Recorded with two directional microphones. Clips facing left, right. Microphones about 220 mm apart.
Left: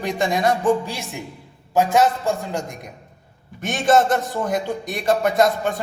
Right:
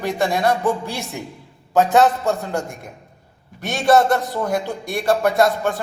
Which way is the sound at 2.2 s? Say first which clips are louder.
Right 2 dB; 10° left (ahead or behind).